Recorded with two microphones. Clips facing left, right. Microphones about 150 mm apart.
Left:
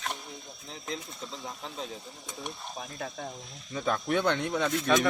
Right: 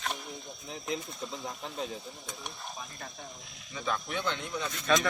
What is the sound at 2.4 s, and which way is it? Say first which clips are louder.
Speech: left 5 dB; 65° left (ahead or behind).